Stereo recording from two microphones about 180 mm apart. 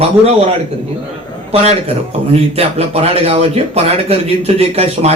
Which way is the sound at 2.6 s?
35° right (ahead or behind).